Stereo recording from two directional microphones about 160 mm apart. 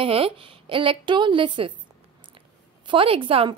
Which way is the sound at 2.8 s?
35° right (ahead or behind).